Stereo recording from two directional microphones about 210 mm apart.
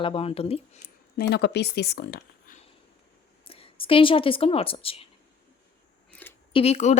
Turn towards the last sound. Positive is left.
turn(degrees=30)  # may be behind; listen again after turning